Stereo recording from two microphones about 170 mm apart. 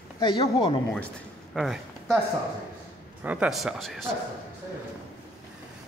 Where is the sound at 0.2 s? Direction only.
30° left (ahead or behind).